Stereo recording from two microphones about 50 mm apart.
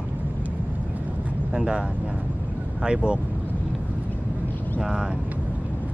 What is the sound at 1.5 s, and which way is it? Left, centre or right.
Speech, right.